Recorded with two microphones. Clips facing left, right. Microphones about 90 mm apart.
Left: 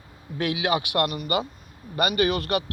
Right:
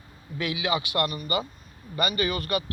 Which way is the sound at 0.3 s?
60° left (ahead or behind).